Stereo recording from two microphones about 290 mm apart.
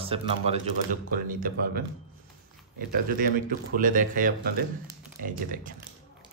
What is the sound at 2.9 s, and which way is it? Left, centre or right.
Speech, right.